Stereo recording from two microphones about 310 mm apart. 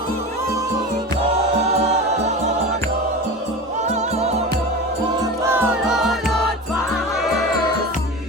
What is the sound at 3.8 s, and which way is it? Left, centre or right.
Music, right.